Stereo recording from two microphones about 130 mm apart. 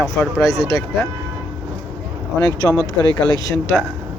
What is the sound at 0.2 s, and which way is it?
Speech, 10° left (ahead or behind).